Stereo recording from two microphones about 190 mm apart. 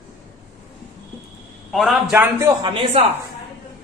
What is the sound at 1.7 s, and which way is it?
A man's voice, centre (ahead or behind).